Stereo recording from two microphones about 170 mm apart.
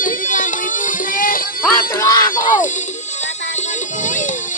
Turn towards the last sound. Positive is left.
turn(degrees=50)  # may be behind; listen again after turning